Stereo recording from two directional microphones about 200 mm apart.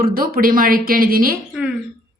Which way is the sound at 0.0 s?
45° right (ahead or behind).